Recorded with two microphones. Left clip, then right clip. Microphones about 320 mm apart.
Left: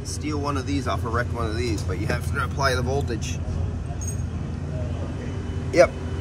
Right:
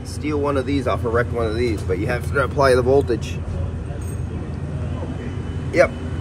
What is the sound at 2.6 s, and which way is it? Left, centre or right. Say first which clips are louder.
Speech: right 9 dB; right.